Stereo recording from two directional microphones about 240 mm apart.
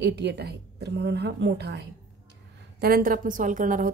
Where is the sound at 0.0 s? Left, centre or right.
Right.